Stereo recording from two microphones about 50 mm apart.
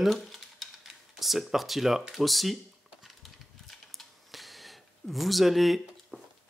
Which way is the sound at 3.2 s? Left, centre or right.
Centre.